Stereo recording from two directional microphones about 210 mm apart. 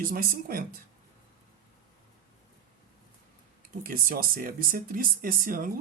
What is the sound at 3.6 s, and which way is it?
Speech, 45° right (ahead or behind).